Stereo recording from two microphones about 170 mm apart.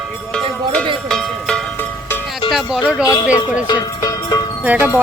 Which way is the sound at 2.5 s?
Centre (ahead or behind).